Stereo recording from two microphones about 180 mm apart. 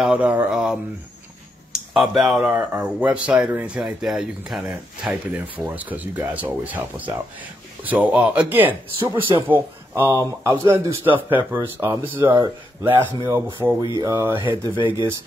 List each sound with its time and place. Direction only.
0.0 s speech: 5° right (ahead or behind)
14.4 s speech: 25° right (ahead or behind)